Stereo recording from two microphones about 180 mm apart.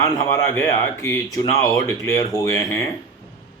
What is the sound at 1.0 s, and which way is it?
Speech, 15° left (ahead or behind).